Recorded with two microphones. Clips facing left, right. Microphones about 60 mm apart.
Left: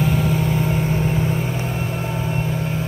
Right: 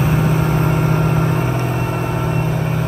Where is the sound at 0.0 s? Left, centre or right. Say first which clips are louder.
Right 3 dB; right.